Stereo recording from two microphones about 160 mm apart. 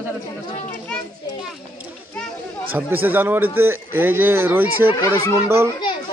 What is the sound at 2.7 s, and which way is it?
A man's voice, 10° right (ahead or behind).